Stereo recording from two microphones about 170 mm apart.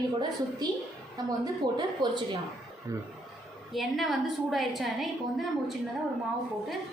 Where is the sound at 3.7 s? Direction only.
Centre (ahead or behind).